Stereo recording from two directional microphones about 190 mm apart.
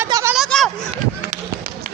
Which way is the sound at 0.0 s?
15° right (ahead or behind).